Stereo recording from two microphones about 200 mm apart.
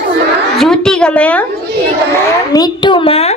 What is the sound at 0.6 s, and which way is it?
Speech, 5° left (ahead or behind).